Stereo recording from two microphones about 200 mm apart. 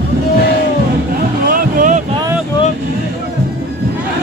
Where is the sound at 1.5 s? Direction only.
40° right (ahead or behind).